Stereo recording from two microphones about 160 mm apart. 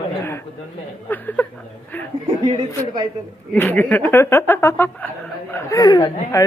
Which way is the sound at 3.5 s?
10° left (ahead or behind).